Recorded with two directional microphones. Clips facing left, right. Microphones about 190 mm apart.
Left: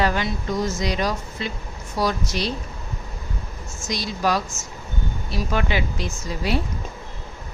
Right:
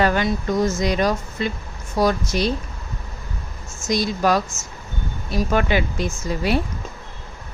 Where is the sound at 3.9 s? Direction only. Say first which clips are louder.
Right 4 dB; 50° right (ahead or behind).